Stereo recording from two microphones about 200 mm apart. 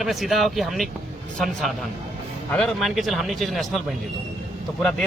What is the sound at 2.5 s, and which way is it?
A man's voice, 5° left (ahead or behind).